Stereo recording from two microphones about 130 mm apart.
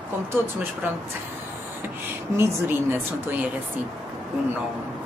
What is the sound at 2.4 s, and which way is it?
Speech, 15° right (ahead or behind).